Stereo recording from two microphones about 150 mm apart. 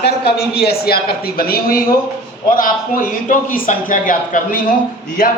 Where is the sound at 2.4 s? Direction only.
65° left (ahead or behind).